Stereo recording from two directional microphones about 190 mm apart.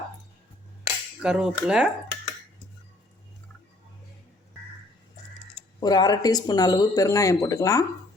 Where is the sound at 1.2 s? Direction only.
5° right (ahead or behind).